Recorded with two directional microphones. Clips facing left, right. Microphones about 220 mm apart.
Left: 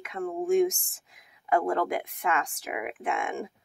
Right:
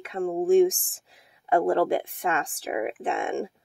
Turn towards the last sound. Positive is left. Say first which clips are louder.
# right 4 dB
turn(degrees=-30)  # may be behind; listen again after turning